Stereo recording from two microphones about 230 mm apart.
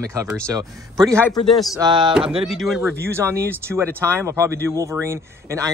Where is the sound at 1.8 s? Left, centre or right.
Centre.